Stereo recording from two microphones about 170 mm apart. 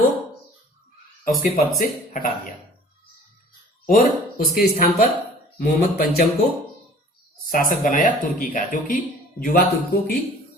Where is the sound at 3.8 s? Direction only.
55° left (ahead or behind).